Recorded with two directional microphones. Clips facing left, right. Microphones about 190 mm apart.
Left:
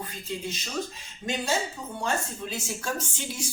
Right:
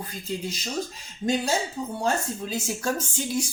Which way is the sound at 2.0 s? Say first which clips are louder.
Right 3 dB; 40° right (ahead or behind).